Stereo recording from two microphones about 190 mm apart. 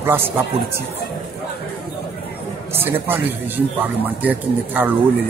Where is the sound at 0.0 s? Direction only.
10° right (ahead or behind).